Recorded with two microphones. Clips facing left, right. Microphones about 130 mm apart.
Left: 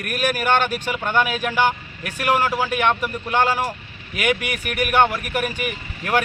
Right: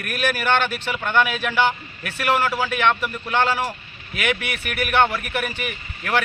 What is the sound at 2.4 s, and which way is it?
Speech, 15° left (ahead or behind).